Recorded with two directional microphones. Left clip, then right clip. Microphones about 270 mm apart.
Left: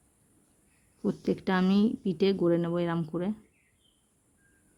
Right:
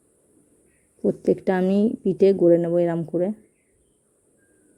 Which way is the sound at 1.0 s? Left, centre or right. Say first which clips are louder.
Right 10 dB; centre.